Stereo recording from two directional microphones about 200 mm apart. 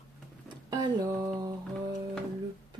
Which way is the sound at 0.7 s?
20° right (ahead or behind).